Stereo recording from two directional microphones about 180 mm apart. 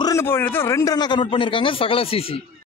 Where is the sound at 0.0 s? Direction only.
15° left (ahead or behind).